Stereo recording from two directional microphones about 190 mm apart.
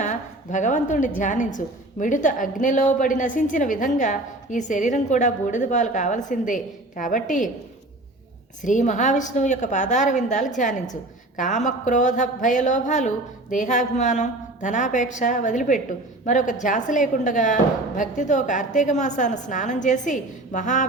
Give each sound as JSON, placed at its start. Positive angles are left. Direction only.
{"t": 0.0, "sound": "speech", "side_deg": 40}
{"t": 8.6, "sound": "speech", "side_deg": 40}